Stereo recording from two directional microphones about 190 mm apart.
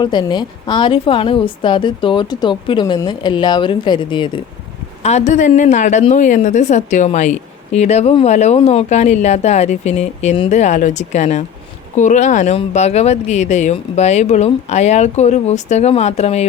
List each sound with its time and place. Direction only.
0.0 s a woman's voice: 25° left (ahead or behind)
5.0 s a woman's voice: 40° left (ahead or behind)